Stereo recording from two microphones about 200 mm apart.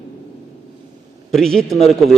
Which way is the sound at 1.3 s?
Centre (ahead or behind).